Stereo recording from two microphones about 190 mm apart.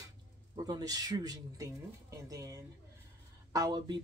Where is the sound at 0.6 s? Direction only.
20° right (ahead or behind).